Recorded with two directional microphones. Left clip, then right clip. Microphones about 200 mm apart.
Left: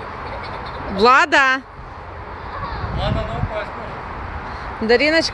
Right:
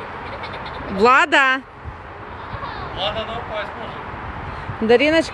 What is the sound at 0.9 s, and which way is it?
Speech, 5° right (ahead or behind).